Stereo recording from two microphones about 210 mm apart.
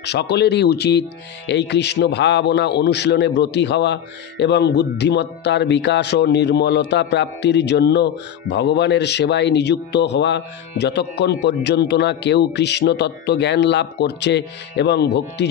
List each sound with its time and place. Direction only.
0.0 s a man's voice: 50° left (ahead or behind)